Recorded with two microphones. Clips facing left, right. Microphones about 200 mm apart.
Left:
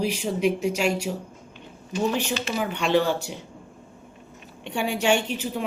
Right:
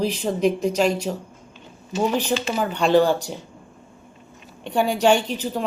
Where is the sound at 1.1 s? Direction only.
65° right (ahead or behind).